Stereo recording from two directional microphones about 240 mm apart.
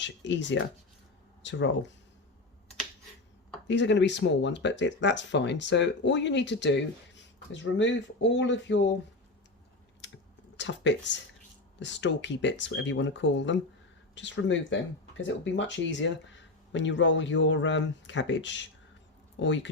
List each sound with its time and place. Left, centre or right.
0.0 s speech: left
3.7 s speech: left
10.6 s speech: left